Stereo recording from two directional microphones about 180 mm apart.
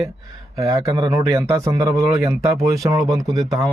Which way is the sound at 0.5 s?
20° right (ahead or behind).